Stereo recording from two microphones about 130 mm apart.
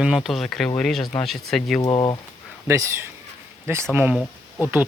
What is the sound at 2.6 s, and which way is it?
Speech, 20° right (ahead or behind).